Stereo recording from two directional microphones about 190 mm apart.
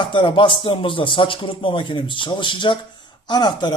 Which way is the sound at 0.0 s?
25° left (ahead or behind).